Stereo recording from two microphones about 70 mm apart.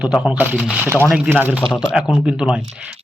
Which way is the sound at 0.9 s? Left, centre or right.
Right.